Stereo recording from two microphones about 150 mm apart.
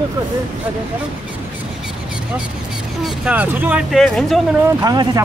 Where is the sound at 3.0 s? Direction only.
10° right (ahead or behind).